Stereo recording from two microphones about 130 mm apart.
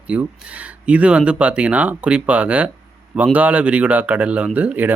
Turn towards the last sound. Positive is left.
turn(degrees=-15)  # may be behind; listen again after turning